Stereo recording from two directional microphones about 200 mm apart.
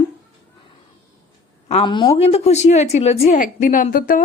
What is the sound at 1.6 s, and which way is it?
A woman's voice, 30° left (ahead or behind).